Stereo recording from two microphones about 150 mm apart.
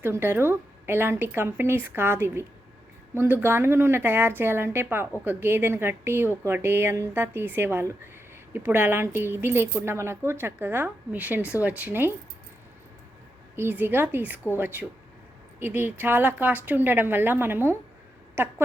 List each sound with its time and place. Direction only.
0.0 s speech: 15° right (ahead or behind)
13.6 s a woman's voice: 15° right (ahead or behind)